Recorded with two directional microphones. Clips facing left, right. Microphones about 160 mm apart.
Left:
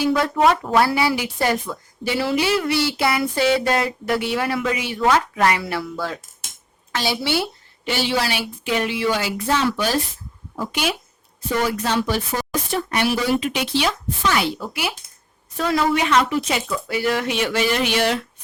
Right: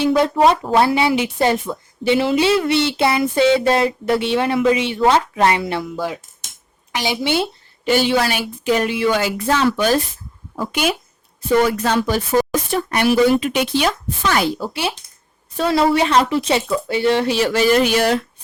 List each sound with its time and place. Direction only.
0.0 s a woman's voice: 25° right (ahead or behind)
7.9 s speech: 50° right (ahead or behind)
14.6 s a woman's voice: 30° right (ahead or behind)